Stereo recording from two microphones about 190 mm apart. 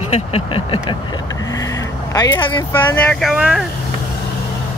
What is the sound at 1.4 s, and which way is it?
Vehicle, 20° left (ahead or behind).